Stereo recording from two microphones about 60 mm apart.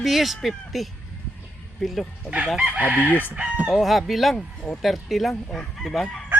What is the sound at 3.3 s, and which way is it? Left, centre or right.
Speech, right.